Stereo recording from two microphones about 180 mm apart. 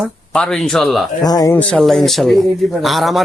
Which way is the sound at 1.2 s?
20° left (ahead or behind).